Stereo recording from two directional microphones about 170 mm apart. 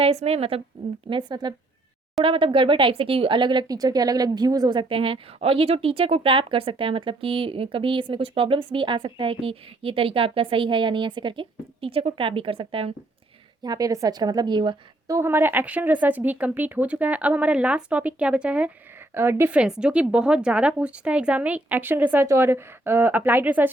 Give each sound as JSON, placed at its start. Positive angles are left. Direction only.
{"t": 0.0, "sound": "a woman's voice", "side_deg": -35}
{"t": 1.1, "sound": "a woman's voice", "side_deg": -25}
{"t": 13.6, "sound": "a woman's voice", "side_deg": -20}